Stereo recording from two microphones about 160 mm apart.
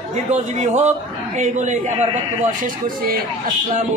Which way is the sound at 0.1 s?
45° right (ahead or behind).